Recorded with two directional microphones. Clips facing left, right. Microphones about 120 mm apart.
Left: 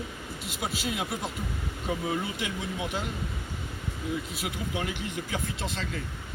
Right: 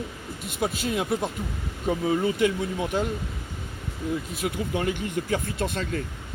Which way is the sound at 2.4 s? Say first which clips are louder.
Right 9 dB; 45° right (ahead or behind).